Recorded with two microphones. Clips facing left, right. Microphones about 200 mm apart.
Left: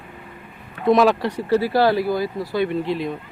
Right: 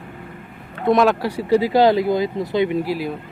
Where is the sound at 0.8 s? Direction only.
Centre (ahead or behind).